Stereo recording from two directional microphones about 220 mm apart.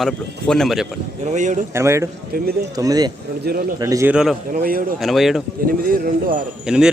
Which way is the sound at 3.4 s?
45° right (ahead or behind).